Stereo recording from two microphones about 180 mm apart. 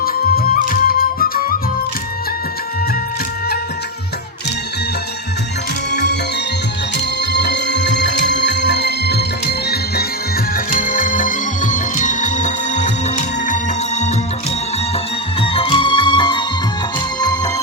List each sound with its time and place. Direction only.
0.0 s music: 55° left (ahead or behind)
5.9 s music: 70° left (ahead or behind); by 14.1 s 40° left (ahead or behind)
14.9 s music: 30° left (ahead or behind)